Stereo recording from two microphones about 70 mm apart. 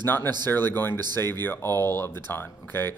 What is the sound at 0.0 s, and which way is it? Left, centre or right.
Speech, left.